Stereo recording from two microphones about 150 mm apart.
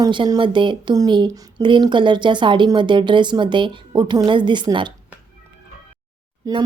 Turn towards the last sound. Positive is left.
turn(degrees=-25)  # may be behind; listen again after turning